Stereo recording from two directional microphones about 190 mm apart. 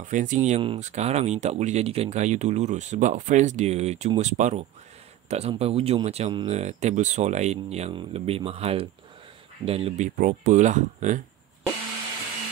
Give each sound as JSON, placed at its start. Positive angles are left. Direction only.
{"t": 0.0, "sound": "speech", "side_deg": -40}